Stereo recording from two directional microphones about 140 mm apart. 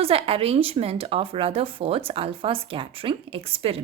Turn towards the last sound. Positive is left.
turn(degrees=-45)  # may be behind; listen again after turning